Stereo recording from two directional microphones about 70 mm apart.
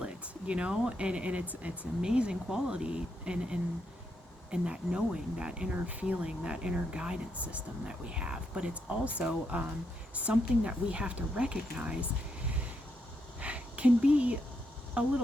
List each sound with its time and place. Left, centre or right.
0.0 s speech: centre
13.4 s a sound: centre
15.0 s speech: centre